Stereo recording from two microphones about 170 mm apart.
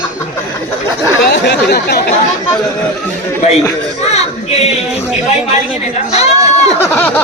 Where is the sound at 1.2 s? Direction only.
80° left.